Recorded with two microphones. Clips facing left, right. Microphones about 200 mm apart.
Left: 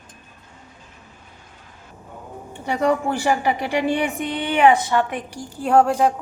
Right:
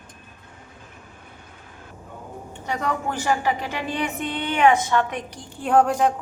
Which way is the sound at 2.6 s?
10° left (ahead or behind).